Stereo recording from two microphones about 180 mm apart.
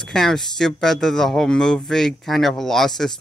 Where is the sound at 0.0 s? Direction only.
5° left (ahead or behind).